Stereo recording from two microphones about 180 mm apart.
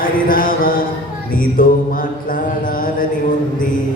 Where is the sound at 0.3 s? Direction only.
50° left (ahead or behind).